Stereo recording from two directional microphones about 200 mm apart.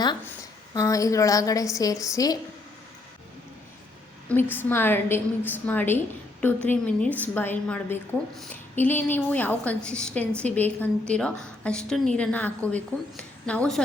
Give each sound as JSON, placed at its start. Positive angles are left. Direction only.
{"t": 0.7, "sound": "a woman's voice", "side_deg": 15}
{"t": 4.5, "sound": "a woman's voice", "side_deg": 10}